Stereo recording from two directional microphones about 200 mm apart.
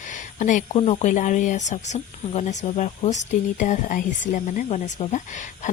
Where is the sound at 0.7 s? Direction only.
30° left (ahead or behind).